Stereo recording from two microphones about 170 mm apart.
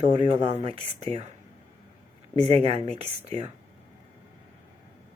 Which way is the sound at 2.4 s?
35° right (ahead or behind).